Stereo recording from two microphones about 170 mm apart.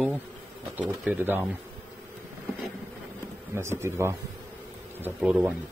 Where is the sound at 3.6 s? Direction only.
15° right (ahead or behind).